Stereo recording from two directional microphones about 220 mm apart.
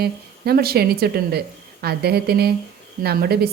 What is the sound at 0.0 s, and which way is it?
Speech, 45° right (ahead or behind).